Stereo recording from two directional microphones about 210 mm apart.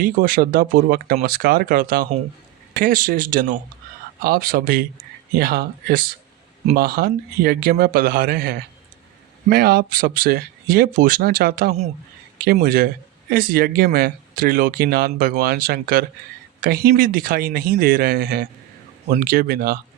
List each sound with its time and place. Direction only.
0.0 s speech: 40° right (ahead or behind)